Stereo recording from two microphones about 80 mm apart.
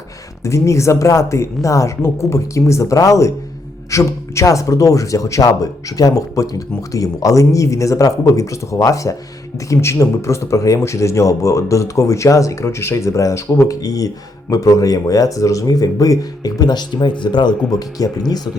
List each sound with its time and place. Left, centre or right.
0.4 s a man's voice: left